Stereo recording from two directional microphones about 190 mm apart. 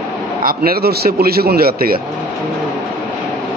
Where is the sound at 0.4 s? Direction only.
50° right (ahead or behind).